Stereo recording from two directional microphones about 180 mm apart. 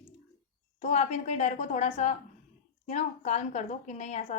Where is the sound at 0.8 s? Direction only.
40° left (ahead or behind).